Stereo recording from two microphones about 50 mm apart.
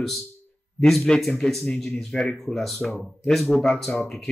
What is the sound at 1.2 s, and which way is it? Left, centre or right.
Speech, centre.